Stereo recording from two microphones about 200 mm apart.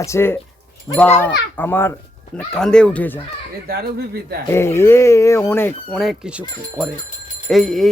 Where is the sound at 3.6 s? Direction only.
50° right (ahead or behind).